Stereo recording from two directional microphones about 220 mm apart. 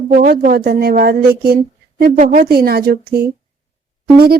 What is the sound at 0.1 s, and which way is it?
Speech, 40° right (ahead or behind).